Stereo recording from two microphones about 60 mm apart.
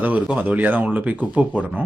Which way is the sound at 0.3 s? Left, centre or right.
Right.